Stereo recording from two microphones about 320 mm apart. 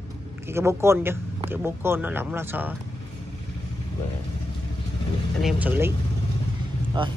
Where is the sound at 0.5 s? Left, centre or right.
Centre.